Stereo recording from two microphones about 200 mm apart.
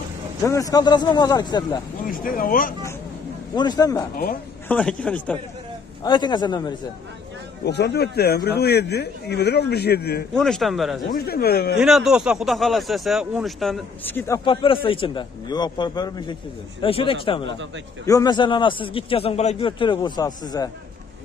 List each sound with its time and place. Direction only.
0.4 s a man's voice: 15° left (ahead or behind)
2.0 s speech: 45° left (ahead or behind)
3.5 s a man's voice: 20° left (ahead or behind)
4.6 s speech: 5° left (ahead or behind)
6.0 s a man's voice: 20° left (ahead or behind)
7.6 s speech: 55° left (ahead or behind)
10.3 s speech: centre (ahead or behind)
11.1 s speech: 50° left (ahead or behind)
11.8 s speech: centre (ahead or behind)
14.1 s speech: 15° left (ahead or behind)
14.4 s a man's voice: 25° left (ahead or behind)